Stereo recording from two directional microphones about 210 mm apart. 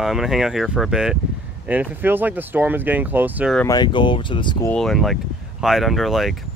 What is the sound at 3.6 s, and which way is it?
Speech, 20° left (ahead or behind).